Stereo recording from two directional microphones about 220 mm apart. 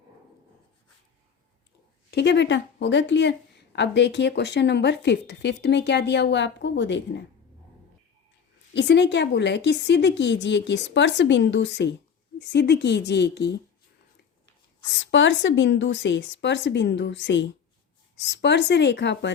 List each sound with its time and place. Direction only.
2.0 s speech: 50° left (ahead or behind)
8.7 s speech: 50° left (ahead or behind)
15.0 s a woman's voice: 55° left (ahead or behind)